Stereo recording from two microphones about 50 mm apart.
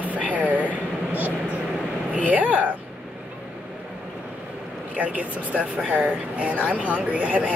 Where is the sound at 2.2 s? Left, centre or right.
Right.